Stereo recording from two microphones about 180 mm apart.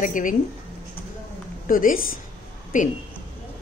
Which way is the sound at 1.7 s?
50° left (ahead or behind).